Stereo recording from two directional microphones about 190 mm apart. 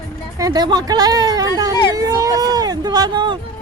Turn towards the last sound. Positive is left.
turn(degrees=-25)  # may be behind; listen again after turning